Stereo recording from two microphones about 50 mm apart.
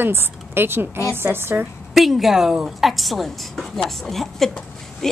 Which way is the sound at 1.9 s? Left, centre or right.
Centre.